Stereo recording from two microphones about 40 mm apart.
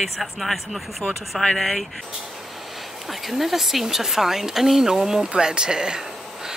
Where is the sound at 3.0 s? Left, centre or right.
Centre.